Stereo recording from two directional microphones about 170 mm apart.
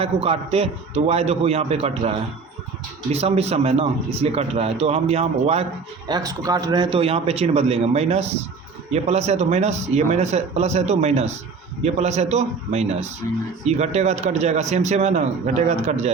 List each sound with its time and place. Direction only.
0.0 s a man's voice: 35° right (ahead or behind)
6.1 s a man's voice: 20° right (ahead or behind); by 16.1 s 40° right (ahead or behind)